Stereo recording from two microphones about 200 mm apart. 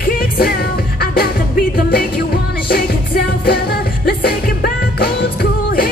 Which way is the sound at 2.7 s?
50° left (ahead or behind).